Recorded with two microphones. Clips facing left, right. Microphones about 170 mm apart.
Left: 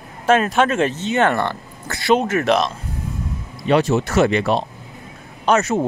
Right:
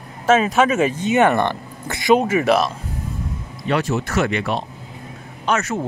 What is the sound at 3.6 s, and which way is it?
Speech, 25° left (ahead or behind).